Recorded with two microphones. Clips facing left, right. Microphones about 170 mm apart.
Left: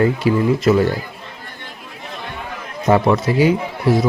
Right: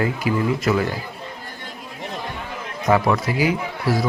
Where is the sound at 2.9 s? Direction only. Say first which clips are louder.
Left 4 dB; 25° left (ahead or behind).